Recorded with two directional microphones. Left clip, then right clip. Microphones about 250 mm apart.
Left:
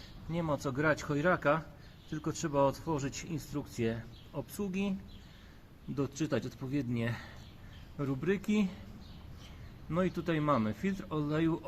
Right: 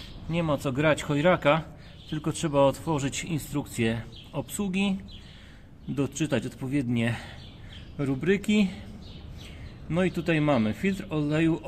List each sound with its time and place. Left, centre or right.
0.3 s speech: centre
6.0 s speech: centre
9.9 s speech: centre